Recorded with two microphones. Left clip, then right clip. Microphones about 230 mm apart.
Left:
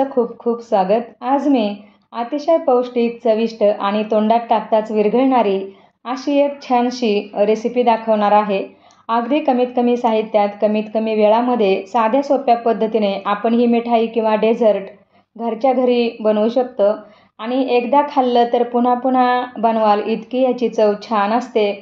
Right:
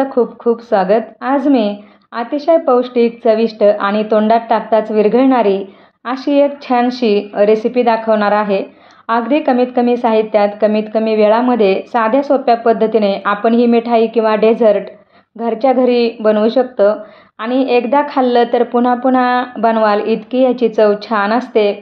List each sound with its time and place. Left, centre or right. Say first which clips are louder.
0.1 s speech: right 4 dB; right
0.7 s a woman's voice: right 2 dB; right
2.7 s a woman's voice: right 4 dB; right